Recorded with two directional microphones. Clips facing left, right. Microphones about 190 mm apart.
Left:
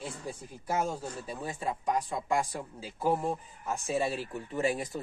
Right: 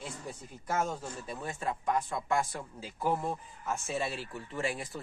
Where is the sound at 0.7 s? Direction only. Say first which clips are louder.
Left 1 dB; 10° left (ahead or behind).